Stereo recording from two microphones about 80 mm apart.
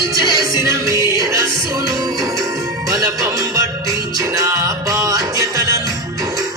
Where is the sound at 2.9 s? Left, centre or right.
Right.